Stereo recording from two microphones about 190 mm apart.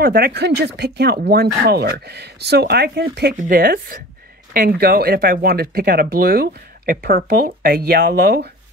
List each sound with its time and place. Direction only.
0.0 s speech: 55° right (ahead or behind)
3.3 s speech: 50° right (ahead or behind)